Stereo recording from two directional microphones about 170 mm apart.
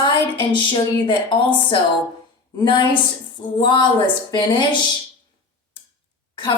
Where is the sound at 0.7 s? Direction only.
30° left (ahead or behind).